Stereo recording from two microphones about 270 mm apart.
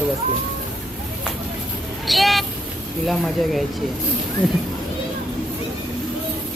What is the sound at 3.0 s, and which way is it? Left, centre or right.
Speech, centre.